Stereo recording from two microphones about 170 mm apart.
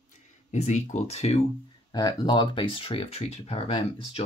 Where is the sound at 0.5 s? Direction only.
45° left (ahead or behind).